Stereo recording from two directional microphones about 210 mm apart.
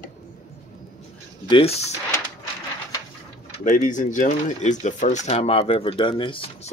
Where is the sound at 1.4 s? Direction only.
25° left (ahead or behind).